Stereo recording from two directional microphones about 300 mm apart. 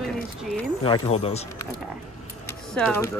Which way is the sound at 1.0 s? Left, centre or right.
Left.